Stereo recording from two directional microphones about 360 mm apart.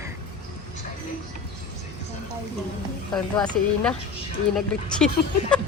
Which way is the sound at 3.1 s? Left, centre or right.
Centre.